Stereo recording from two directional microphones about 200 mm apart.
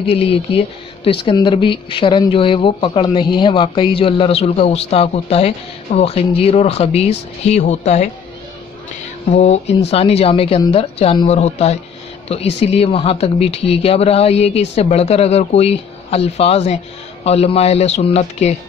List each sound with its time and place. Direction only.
0.1 s speech: 30° left (ahead or behind)
9.3 s speech: 35° left (ahead or behind)